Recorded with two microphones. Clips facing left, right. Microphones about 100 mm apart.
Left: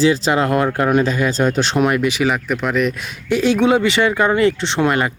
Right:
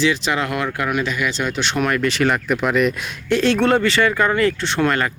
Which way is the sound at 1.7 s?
20° left (ahead or behind).